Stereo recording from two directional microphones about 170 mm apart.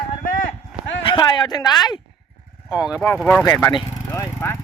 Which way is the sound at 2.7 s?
5° right (ahead or behind).